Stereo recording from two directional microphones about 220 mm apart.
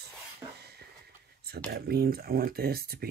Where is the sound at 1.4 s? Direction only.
45° right (ahead or behind).